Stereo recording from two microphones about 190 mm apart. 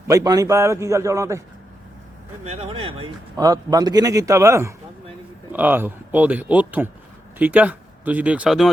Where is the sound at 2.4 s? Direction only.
35° right (ahead or behind).